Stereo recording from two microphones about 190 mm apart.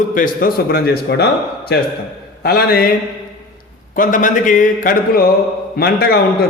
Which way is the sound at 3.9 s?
45° left (ahead or behind).